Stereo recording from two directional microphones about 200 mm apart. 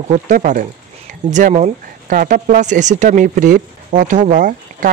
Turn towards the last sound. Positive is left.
turn(degrees=-40)  # may be behind; listen again after turning